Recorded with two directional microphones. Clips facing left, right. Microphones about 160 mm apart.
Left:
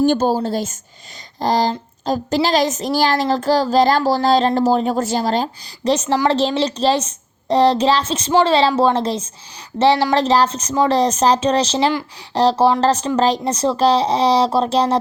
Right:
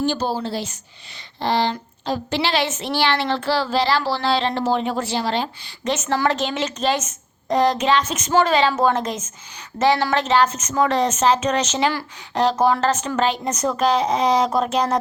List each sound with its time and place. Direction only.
0.0 s a woman's voice: 50° left (ahead or behind); by 14.9 s 30° left (ahead or behind)